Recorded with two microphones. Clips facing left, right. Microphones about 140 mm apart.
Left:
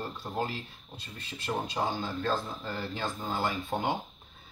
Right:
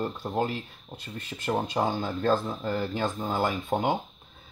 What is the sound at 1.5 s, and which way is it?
Speech, 50° right (ahead or behind).